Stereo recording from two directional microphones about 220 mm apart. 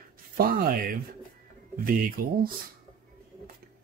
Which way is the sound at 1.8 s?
40° right (ahead or behind).